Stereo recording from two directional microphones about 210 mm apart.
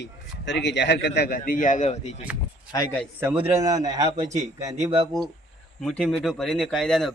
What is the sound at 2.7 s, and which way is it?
Speech, 10° left (ahead or behind).